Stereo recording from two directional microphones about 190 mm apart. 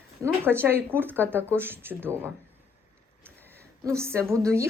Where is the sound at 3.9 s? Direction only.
15° right (ahead or behind).